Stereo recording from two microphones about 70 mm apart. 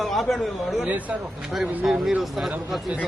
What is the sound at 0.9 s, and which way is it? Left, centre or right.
Speech, right.